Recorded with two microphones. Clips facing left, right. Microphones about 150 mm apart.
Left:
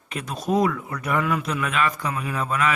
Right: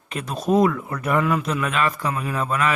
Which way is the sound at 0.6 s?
45° right (ahead or behind).